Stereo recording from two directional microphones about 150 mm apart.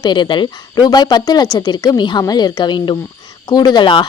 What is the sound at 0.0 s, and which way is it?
Speech, 30° left (ahead or behind).